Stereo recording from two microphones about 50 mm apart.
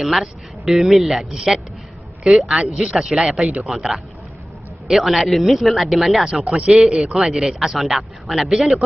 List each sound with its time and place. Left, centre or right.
0.0 s a man's voice: centre
6.4 s a man's voice: right; by 8.8 s centre